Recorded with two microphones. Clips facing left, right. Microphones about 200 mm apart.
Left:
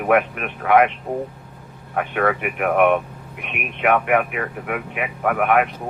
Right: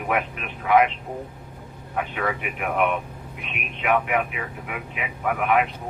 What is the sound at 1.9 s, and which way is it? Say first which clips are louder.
Speech: left 6 dB; 60° left (ahead or behind).